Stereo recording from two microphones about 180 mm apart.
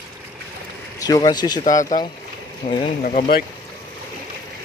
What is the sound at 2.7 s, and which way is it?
Speech, 35° left (ahead or behind).